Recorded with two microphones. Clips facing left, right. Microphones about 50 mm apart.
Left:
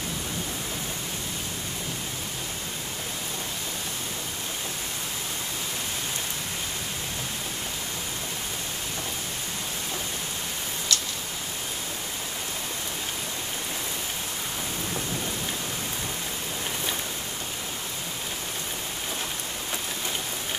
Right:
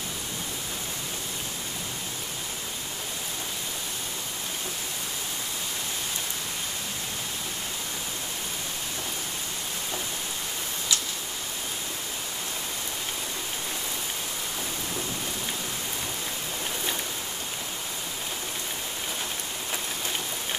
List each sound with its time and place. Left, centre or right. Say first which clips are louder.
10.9 s tick-tock: left 1 dB; centre